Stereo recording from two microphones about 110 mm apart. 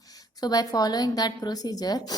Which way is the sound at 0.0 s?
35° left (ahead or behind).